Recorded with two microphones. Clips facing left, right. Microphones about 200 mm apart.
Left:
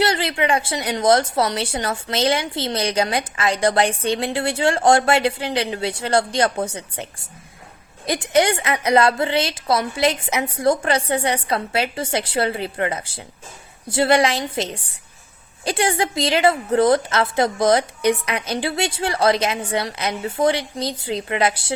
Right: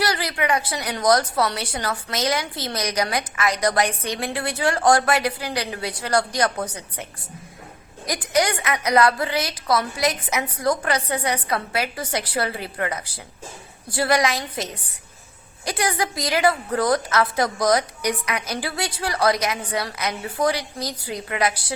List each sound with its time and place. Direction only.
0.0 s a woman's voice: 25° left (ahead or behind)